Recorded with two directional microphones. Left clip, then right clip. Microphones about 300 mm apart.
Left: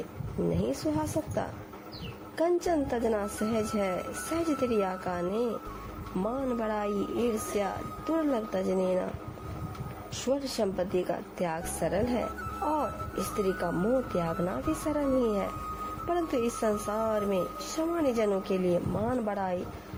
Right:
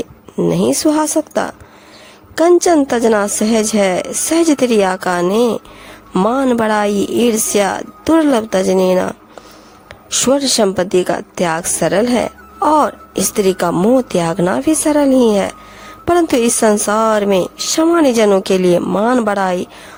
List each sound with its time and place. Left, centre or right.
0.5 s a woman's voice: right
10.2 s a woman's voice: right